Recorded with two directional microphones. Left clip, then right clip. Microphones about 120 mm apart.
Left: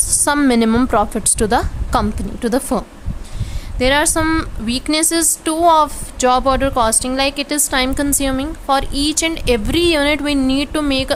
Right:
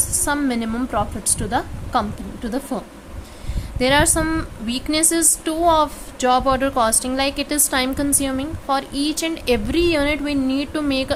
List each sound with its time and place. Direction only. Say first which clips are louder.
0.3 s a woman's voice: left 8 dB; 50° left (ahead or behind)
3.8 s a woman's voice: left 2 dB; 15° left (ahead or behind)